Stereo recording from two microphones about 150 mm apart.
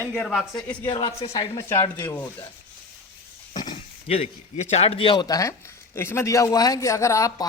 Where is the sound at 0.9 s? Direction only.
35° left (ahead or behind).